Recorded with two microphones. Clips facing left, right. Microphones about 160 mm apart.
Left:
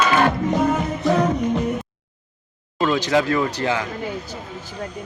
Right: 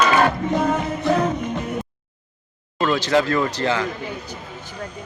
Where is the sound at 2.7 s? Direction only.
10° left (ahead or behind).